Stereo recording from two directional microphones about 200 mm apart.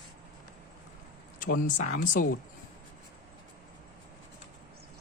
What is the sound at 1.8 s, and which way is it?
Speech, 40° left (ahead or behind).